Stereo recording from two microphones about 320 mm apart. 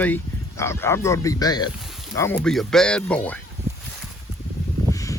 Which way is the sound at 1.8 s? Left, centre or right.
Centre.